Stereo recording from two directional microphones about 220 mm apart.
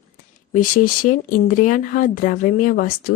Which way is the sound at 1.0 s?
40° left (ahead or behind).